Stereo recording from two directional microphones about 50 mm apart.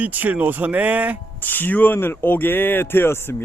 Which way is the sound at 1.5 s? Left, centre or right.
Left.